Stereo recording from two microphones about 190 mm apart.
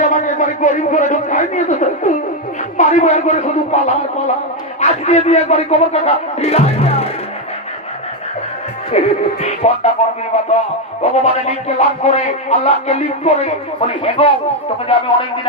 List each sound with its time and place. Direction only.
0.0 s music: 40° left (ahead or behind)
8.9 s music: 35° left (ahead or behind)